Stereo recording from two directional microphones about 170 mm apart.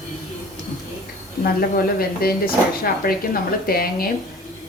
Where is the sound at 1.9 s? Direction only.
60° left (ahead or behind).